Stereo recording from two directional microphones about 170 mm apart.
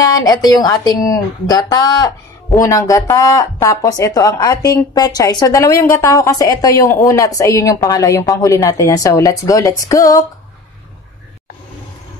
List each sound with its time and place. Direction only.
0.0 s a woman's voice: 20° left (ahead or behind)